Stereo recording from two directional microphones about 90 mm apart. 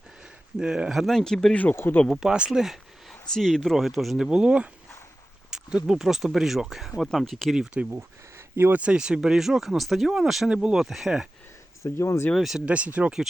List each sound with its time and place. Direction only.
0.6 s speech: 10° right (ahead or behind)
1.5 s speech: 20° left (ahead or behind)
2.0 s speech: 10° right (ahead or behind)
7.5 s speech: 10° right (ahead or behind)
7.9 s speech: 30° right (ahead or behind)
8.8 s speech: 10° right (ahead or behind)
11.8 s speech: 30° left (ahead or behind)
12.3 s speech: centre (ahead or behind)